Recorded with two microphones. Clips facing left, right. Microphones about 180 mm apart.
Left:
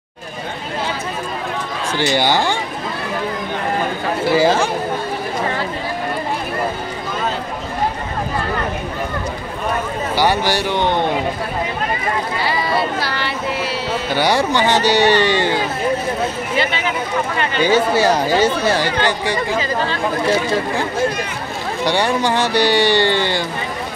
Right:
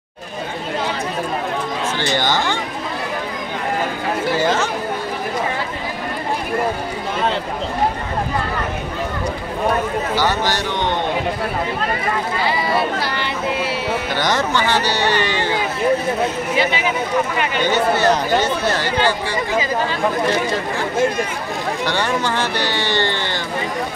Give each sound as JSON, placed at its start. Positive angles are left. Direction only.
{"t": 2.0, "sound": "speech", "side_deg": 10}
{"t": 4.3, "sound": "speech", "side_deg": 10}
{"t": 10.1, "sound": "speech", "side_deg": 10}
{"t": 12.4, "sound": "speech", "side_deg": -20}
{"t": 14.1, "sound": "speech", "side_deg": 10}
{"t": 16.5, "sound": "speech", "side_deg": -10}
{"t": 17.6, "sound": "speech", "side_deg": 10}
{"t": 21.8, "sound": "speech", "side_deg": 15}